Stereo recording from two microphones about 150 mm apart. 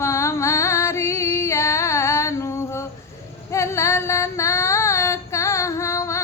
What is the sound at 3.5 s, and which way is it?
Female singing, 20° left (ahead or behind).